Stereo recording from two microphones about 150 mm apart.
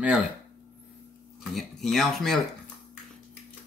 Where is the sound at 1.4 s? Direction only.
Centre (ahead or behind).